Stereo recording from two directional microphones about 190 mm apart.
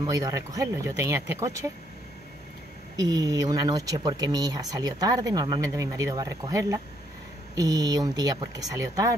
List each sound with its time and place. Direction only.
0.0 s speech: 20° right (ahead or behind)
3.0 s speech: 20° right (ahead or behind)